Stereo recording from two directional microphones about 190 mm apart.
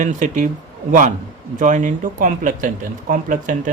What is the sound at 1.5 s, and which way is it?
Speech, 40° right (ahead or behind).